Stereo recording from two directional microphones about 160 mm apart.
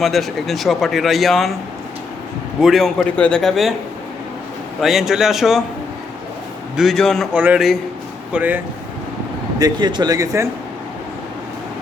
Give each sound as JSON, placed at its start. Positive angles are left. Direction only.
{"t": 0.0, "sound": "speech", "side_deg": 0}
{"t": 2.6, "sound": "speech", "side_deg": 0}
{"t": 4.8, "sound": "speech", "side_deg": 0}
{"t": 6.7, "sound": "speech", "side_deg": 0}
{"t": 9.6, "sound": "speech", "side_deg": -25}